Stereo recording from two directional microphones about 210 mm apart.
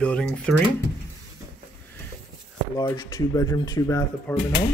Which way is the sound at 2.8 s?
20° left (ahead or behind).